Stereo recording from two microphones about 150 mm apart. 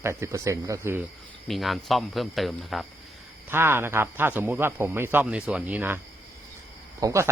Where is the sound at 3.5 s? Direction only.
15° right (ahead or behind).